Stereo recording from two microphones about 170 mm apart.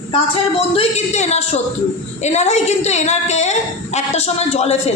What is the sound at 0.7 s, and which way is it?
A woman's voice, 40° left (ahead or behind).